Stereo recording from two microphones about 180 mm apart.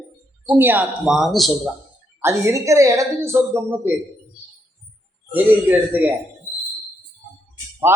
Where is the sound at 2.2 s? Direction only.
15° right (ahead or behind).